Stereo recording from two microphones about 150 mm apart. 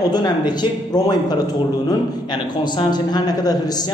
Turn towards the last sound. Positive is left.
turn(degrees=25)  # may be behind; listen again after turning